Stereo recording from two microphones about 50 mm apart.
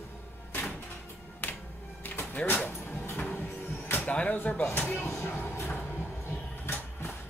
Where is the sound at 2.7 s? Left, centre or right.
Left.